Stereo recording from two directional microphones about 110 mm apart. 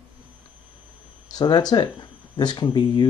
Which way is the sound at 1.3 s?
35° left (ahead or behind).